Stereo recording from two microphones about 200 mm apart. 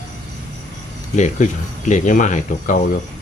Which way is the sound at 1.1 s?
35° left (ahead or behind).